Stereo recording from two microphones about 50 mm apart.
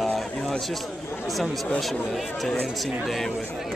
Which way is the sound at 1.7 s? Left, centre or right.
Centre.